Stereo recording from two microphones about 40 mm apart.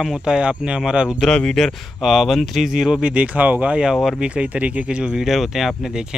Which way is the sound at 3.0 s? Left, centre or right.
Right.